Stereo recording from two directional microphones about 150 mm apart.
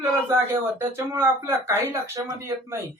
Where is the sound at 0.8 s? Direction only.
15° right (ahead or behind).